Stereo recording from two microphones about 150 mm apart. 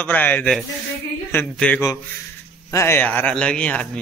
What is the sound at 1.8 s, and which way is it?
Speech, 20° left (ahead or behind).